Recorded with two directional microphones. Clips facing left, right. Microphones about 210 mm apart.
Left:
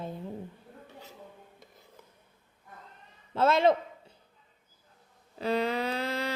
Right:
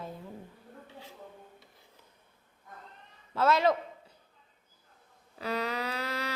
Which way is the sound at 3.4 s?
25° left (ahead or behind).